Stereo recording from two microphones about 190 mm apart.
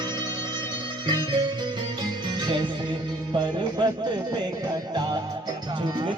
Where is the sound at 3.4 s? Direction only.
25° right (ahead or behind).